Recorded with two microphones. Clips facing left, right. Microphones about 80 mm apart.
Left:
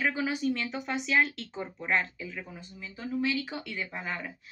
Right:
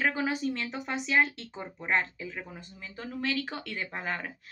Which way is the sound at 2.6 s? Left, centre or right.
Right.